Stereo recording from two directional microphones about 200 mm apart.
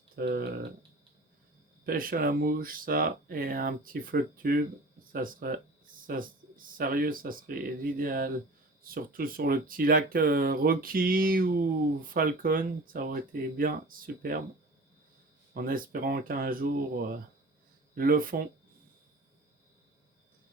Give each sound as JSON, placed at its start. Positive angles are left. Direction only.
{"t": 0.2, "sound": "speech", "side_deg": -50}
{"t": 1.8, "sound": "speech", "side_deg": -45}
{"t": 15.5, "sound": "speech", "side_deg": -45}